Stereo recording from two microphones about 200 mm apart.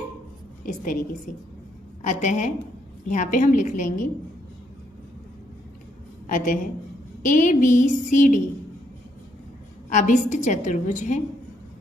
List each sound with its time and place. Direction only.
0.6 s a woman's voice: 40° left (ahead or behind)
2.0 s a woman's voice: 35° left (ahead or behind)
6.2 s a woman's voice: 40° left (ahead or behind)
9.9 s a woman's voice: 40° left (ahead or behind)